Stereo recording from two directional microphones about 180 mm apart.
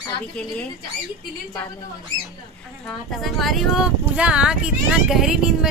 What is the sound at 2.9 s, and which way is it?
Speech, centre (ahead or behind).